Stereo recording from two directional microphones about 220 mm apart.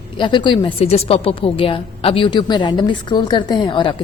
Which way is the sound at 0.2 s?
20° left (ahead or behind).